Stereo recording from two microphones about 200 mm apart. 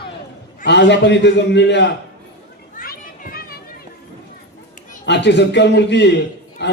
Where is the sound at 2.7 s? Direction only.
50° left (ahead or behind).